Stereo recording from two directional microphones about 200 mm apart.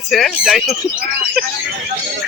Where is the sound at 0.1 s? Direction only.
Centre (ahead or behind).